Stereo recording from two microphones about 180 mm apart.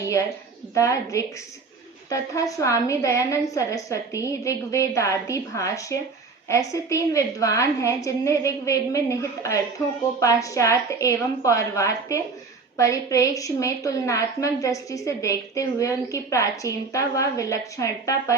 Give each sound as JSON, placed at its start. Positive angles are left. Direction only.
{"t": 0.7, "sound": "a woman's voice", "side_deg": 15}